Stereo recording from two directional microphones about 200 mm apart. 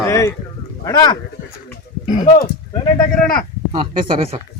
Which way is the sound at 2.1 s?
40° left (ahead or behind).